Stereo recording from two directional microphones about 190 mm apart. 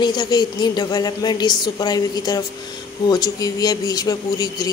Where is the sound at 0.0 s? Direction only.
20° left (ahead or behind).